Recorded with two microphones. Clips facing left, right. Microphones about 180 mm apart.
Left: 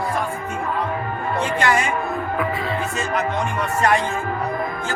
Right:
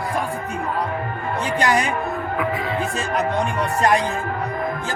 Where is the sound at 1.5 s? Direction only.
40° right (ahead or behind).